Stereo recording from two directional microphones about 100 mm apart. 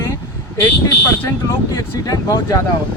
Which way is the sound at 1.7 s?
35° left (ahead or behind).